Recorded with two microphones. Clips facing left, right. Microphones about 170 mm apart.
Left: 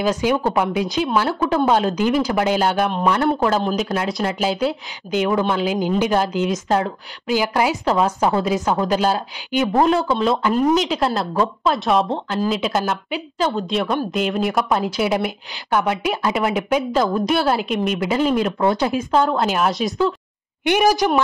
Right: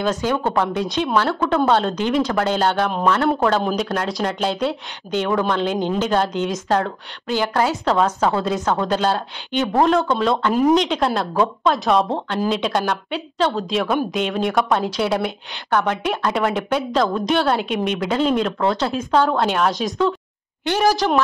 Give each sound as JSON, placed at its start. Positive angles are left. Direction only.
{"t": 0.0, "sound": "a woman's voice", "side_deg": 10}
{"t": 18.9, "sound": "speech", "side_deg": 0}
{"t": 20.6, "sound": "a woman's voice", "side_deg": 15}